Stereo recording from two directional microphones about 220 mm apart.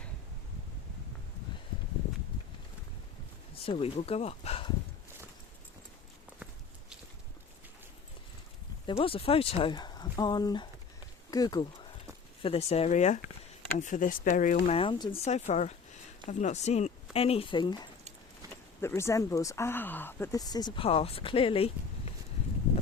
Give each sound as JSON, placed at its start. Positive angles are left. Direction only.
{"t": 3.5, "sound": "speech", "side_deg": 25}
{"t": 8.9, "sound": "speech", "side_deg": 25}
{"t": 14.8, "sound": "speech", "side_deg": 20}